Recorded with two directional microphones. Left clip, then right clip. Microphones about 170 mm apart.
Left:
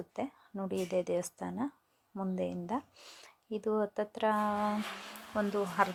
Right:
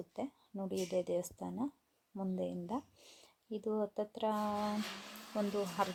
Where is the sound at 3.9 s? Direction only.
5° left (ahead or behind).